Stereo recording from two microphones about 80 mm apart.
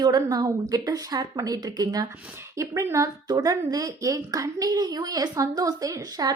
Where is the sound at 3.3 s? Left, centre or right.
Right.